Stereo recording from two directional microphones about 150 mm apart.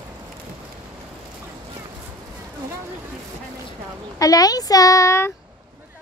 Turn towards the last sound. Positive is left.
turn(degrees=20)  # may be behind; listen again after turning